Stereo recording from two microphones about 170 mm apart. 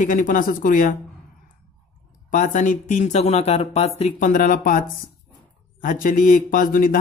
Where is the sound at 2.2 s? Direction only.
50° left (ahead or behind).